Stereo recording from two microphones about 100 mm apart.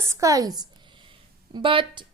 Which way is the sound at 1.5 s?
55° right (ahead or behind).